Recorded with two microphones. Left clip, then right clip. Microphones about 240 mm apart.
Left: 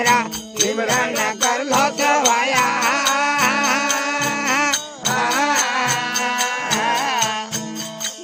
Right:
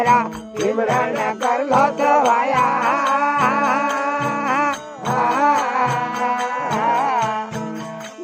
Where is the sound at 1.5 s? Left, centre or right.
Left.